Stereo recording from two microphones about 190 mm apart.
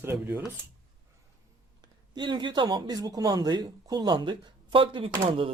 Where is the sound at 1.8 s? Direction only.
25° right (ahead or behind).